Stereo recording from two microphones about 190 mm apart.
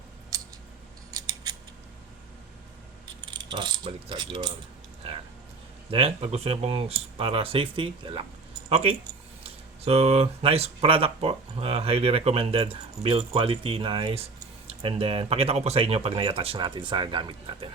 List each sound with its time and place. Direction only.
1.1 s scissors: 20° right (ahead or behind)
3.3 s speech: 25° right (ahead or behind)
5.9 s speech: 30° right (ahead or behind)